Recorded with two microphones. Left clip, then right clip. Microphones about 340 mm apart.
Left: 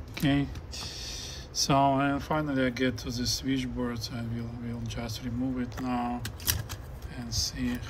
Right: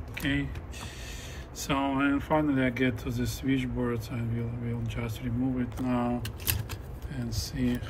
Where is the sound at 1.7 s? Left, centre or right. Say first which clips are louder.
Left 3 dB; centre.